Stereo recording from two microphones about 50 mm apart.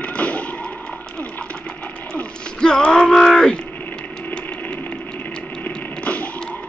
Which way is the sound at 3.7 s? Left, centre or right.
Left.